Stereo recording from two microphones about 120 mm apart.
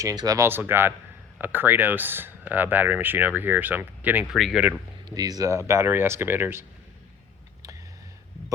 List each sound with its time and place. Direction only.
0.0 s speech: 30° right (ahead or behind)
0.4 s speech: 20° right (ahead or behind)
4.3 s speech: centre (ahead or behind)
5.0 s speech: 35° right (ahead or behind)